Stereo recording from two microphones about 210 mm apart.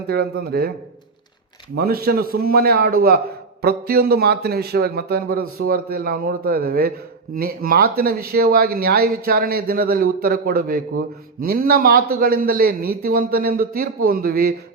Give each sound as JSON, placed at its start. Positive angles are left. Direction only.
{"t": 0.1, "sound": "speech", "side_deg": -50}
{"t": 1.7, "sound": "speech", "side_deg": -45}